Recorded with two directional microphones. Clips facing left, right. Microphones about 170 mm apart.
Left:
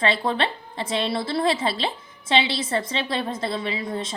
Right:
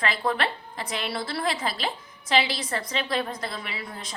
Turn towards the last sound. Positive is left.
turn(degrees=25)  # may be behind; listen again after turning